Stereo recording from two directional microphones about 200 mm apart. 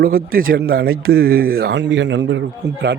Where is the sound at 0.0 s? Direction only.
50° right (ahead or behind).